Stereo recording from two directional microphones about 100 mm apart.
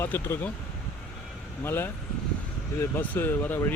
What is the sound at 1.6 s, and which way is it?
Speech, 20° left (ahead or behind).